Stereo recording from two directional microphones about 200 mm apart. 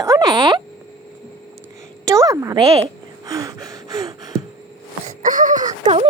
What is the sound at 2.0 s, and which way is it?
Speech, 15° right (ahead or behind).